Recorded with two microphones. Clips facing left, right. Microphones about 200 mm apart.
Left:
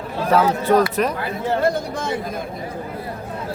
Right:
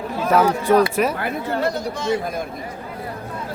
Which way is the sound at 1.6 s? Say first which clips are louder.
Left 1 dB; 50° left (ahead or behind).